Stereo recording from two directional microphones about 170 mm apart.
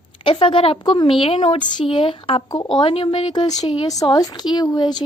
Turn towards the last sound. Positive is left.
turn(degrees=25)  # may be behind; listen again after turning